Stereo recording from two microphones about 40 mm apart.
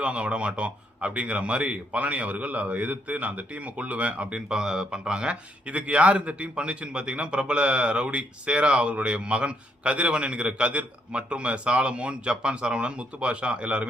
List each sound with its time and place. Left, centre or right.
0.0 s speech: right
5.6 s a man's voice: right